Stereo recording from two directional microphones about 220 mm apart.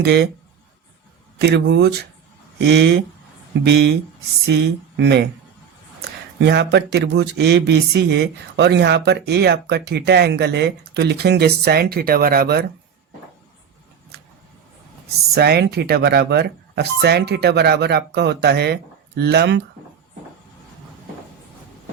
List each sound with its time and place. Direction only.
0.0 s speech: 50° right (ahead or behind)
1.4 s speech: 50° right (ahead or behind)
6.4 s speech: 50° right (ahead or behind)
15.4 s speech: 45° right (ahead or behind)